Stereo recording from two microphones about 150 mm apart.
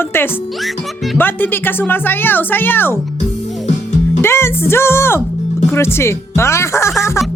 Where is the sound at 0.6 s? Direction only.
Centre (ahead or behind).